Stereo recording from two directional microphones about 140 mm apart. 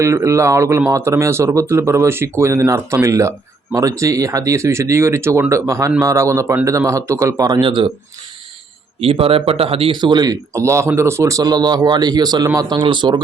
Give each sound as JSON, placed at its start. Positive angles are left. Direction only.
{"t": 0.0, "sound": "speech", "side_deg": -20}
{"t": 7.6, "sound": "speech", "side_deg": -35}
{"t": 9.0, "sound": "speech", "side_deg": -45}